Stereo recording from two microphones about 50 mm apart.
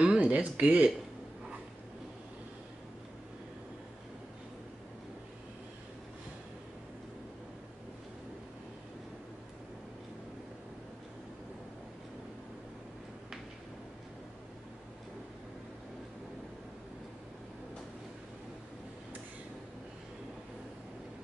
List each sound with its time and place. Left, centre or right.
0.0 s speech: right